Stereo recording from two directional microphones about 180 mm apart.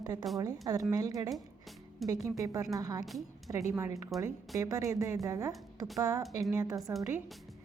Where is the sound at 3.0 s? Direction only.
Centre (ahead or behind).